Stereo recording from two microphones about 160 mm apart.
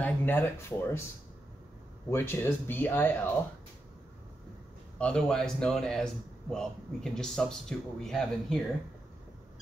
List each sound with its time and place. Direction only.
0.0 s speech: 10° left (ahead or behind)
2.0 s speech: 15° left (ahead or behind)
4.9 s speech: 5° left (ahead or behind)